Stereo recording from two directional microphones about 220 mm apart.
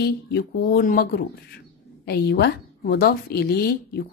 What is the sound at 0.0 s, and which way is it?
A woman's voice, 45° left (ahead or behind).